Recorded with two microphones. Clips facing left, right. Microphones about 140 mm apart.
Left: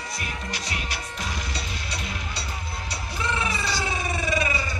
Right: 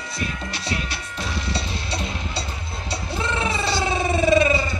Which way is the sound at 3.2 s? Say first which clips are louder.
Right 3 dB; 30° right (ahead or behind).